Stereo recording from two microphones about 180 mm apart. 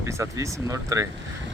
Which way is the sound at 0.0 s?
15° right (ahead or behind).